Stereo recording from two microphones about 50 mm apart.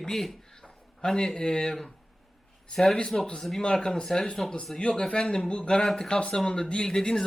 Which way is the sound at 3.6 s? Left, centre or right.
Centre.